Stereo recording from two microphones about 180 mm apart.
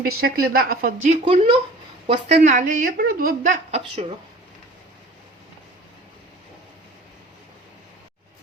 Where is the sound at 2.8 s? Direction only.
55° right (ahead or behind); by 4.0 s 35° right (ahead or behind).